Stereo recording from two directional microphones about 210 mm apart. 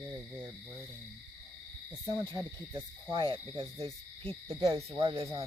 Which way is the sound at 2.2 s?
20° right (ahead or behind).